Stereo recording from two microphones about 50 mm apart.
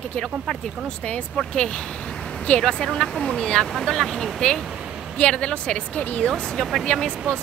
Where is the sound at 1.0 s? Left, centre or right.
Left.